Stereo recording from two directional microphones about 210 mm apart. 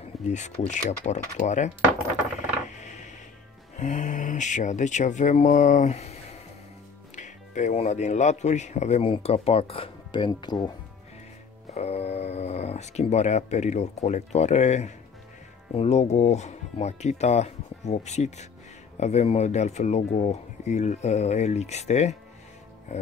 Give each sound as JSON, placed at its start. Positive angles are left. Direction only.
{"t": 0.3, "sound": "speech", "side_deg": 35}
{"t": 2.8, "sound": "music", "side_deg": 35}
{"t": 3.7, "sound": "speech", "side_deg": 35}
{"t": 7.2, "sound": "speech", "side_deg": 35}
{"t": 11.7, "sound": "speech", "side_deg": 30}